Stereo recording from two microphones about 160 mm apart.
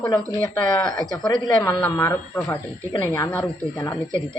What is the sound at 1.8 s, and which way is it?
Speech, 10° left (ahead or behind).